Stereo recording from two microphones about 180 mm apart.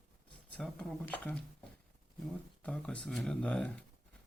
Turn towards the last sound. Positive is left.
turn(degrees=5)  # may be behind; listen again after turning